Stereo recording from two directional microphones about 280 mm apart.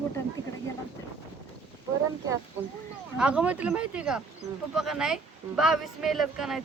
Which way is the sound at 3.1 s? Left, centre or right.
Centre.